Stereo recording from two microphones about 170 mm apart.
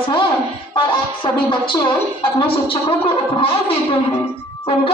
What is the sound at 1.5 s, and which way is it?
A woman's voice, 30° left (ahead or behind).